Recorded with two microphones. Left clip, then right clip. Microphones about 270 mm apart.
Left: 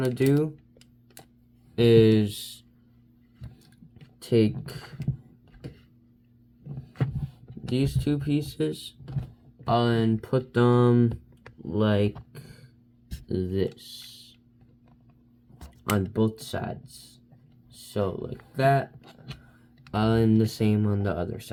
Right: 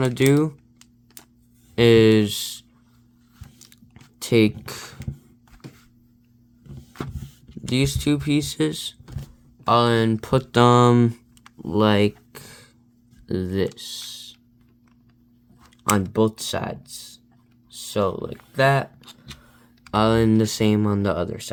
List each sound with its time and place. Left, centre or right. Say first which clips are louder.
0.0 s speech: right 5 dB; right
1.7 s speech: right 4 dB; right
4.2 s speech: right 5 dB; right
7.7 s speech: right 5 dB; right
11.6 s a sound: right 6 dB; right
13.2 s speech: right 4 dB; right
15.8 s speech: right 6 dB; right
17.7 s speech: right 6 dB; right
19.9 s speech: right 6 dB; right